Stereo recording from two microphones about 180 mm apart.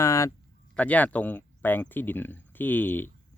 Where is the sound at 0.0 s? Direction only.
15° left (ahead or behind).